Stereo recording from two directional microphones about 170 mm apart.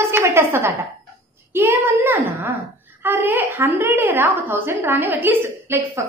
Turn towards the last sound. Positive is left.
turn(degrees=-15)  # may be behind; listen again after turning